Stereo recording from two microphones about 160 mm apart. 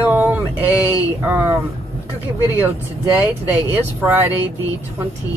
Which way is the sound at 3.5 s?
10° right (ahead or behind).